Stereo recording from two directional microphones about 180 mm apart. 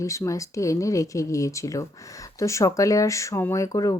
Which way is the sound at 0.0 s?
15° left (ahead or behind).